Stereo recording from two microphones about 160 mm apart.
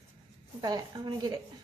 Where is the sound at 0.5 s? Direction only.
25° right (ahead or behind).